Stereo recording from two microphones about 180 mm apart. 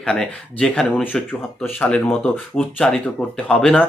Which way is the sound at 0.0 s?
5° left (ahead or behind).